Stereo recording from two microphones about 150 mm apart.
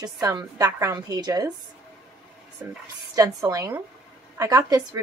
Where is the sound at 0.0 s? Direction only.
25° right (ahead or behind).